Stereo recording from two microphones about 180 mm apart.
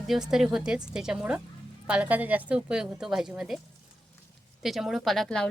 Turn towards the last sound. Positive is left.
turn(degrees=5)  # may be behind; listen again after turning